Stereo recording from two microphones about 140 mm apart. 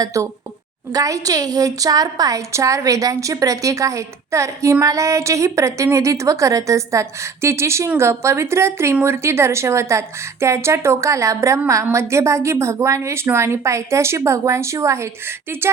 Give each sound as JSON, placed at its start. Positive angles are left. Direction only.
{"t": 0.0, "sound": "a woman's voice", "side_deg": -25}